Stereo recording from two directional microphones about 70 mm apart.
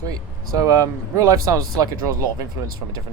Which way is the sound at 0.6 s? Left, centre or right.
Right.